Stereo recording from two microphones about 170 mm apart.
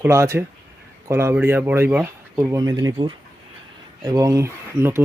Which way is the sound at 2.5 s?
20° right (ahead or behind).